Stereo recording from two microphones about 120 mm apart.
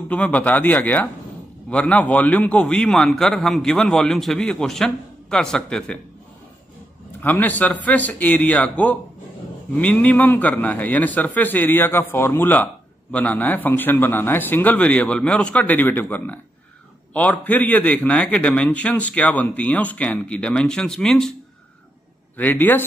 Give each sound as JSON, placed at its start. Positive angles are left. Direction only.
{"t": 0.1, "sound": "a man's voice", "side_deg": 10}
{"t": 7.2, "sound": "a man's voice", "side_deg": 15}
{"t": 22.4, "sound": "a man's voice", "side_deg": 15}